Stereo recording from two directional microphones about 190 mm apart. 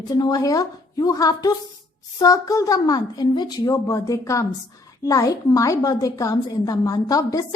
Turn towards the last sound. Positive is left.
turn(degrees=20)  # may be behind; listen again after turning